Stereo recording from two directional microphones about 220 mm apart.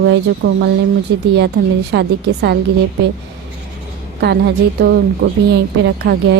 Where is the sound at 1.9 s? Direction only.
50° right (ahead or behind).